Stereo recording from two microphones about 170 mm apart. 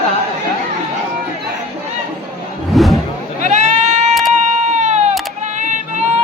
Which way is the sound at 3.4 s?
45° right (ahead or behind).